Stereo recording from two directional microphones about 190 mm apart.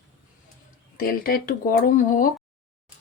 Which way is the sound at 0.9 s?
50° left (ahead or behind).